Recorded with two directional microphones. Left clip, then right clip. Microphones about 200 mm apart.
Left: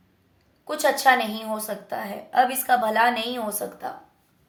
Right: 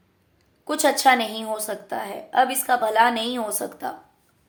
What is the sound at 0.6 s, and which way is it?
A woman's voice, 35° right (ahead or behind).